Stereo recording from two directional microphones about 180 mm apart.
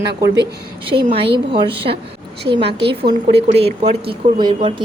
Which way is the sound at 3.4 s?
35° right (ahead or behind).